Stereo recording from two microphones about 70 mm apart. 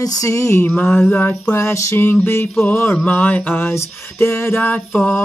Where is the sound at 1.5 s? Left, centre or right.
Left.